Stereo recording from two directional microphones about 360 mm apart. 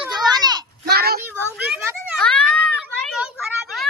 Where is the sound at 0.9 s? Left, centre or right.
Right.